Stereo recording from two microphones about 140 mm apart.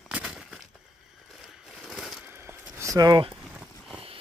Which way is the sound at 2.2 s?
15° right (ahead or behind).